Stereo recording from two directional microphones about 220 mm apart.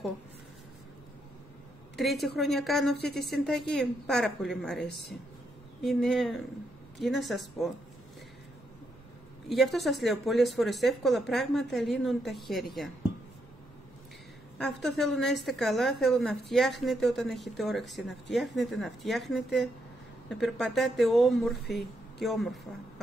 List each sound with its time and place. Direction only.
2.0 s a woman's voice: centre (ahead or behind)
3.0 s a woman's voice: 45° left (ahead or behind)
3.3 s a woman's voice: centre (ahead or behind)
9.5 s a woman's voice: centre (ahead or behind)
14.6 s a woman's voice: centre (ahead or behind)